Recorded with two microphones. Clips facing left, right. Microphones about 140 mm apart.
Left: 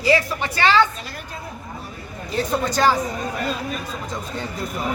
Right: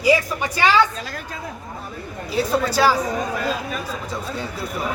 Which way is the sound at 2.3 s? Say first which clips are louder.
Right 2 dB; 5° right (ahead or behind).